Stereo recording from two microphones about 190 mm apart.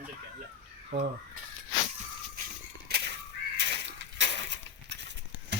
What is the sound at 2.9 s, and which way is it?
Crow, 55° right (ahead or behind).